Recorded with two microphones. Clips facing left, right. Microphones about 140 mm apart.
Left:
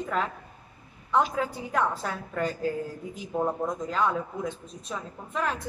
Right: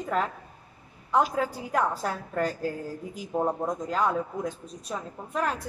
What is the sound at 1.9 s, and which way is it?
Speech, 40° right (ahead or behind).